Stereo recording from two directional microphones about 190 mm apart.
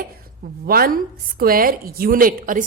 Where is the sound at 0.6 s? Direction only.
50° right (ahead or behind).